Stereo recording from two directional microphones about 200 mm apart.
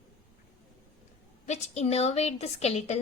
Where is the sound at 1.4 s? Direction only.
35° left (ahead or behind).